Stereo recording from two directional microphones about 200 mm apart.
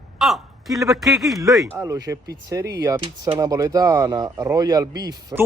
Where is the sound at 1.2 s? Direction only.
Centre (ahead or behind).